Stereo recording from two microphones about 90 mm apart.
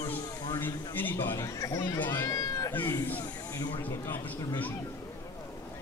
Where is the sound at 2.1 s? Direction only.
45° left (ahead or behind).